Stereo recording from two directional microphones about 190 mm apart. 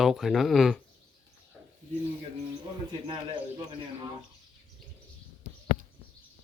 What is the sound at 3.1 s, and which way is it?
Speech, 25° right (ahead or behind).